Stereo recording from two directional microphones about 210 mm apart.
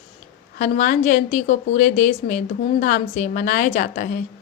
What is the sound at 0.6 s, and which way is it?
A woman's voice, 35° left (ahead or behind).